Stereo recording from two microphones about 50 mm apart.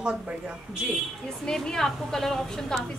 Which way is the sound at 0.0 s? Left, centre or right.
Right.